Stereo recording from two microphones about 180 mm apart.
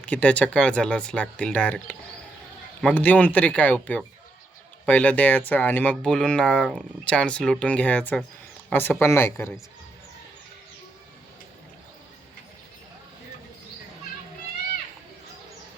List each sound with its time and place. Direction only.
0.0 s speech: 5° left (ahead or behind)